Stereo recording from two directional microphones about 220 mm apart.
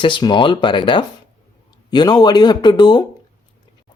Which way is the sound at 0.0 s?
20° left (ahead or behind).